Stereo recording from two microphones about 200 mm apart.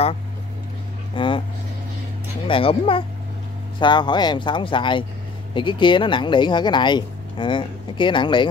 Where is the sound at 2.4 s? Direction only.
25° left (ahead or behind).